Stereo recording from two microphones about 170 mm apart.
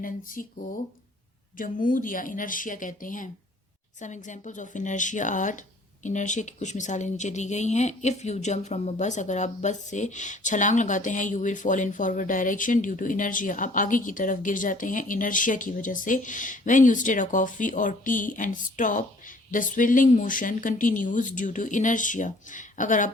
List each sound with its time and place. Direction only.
0.4 s speech: 50° left (ahead or behind)
1.5 s speech: 55° left (ahead or behind)